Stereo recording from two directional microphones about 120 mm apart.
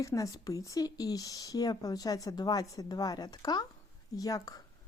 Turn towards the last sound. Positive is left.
turn(degrees=30)  # may be behind; listen again after turning